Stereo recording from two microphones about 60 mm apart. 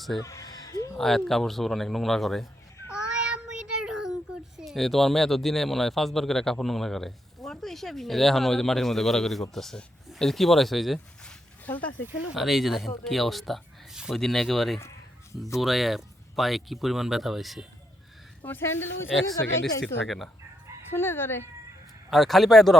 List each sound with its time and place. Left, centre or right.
0.2 s a sound: left
0.9 s speech: centre
2.9 s child singing: centre
4.5 s speech: centre
11.6 s speech: left
12.3 s speech: centre
14.8 s a sound: left
15.5 s speech: centre
18.4 s speech: left
19.8 s speech: centre
20.9 s speech: left
22.1 s speech: centre